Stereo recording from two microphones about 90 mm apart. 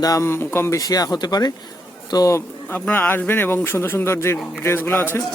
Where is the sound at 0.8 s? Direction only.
45° left (ahead or behind).